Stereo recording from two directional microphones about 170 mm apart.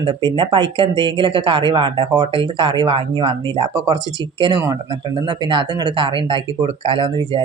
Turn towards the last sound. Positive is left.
turn(degrees=-30)  # may be behind; listen again after turning